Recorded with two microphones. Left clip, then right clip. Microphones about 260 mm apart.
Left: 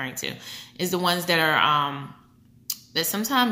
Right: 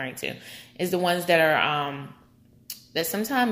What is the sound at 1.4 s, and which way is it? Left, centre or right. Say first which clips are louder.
Speech: left 1 dB; left.